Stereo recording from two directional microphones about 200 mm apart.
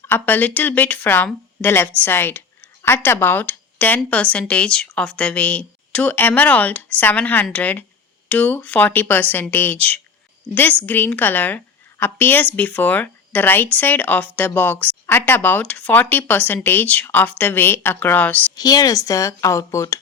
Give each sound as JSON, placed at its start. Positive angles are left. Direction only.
{"t": 0.1, "sound": "speech", "side_deg": 10}
{"t": 18.5, "sound": "speech", "side_deg": 20}